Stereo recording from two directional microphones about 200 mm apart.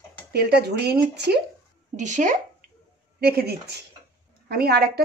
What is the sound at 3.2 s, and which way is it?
Speech, 55° right (ahead or behind).